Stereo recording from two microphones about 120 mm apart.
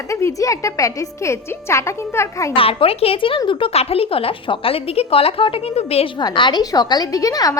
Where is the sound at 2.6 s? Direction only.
50° left (ahead or behind).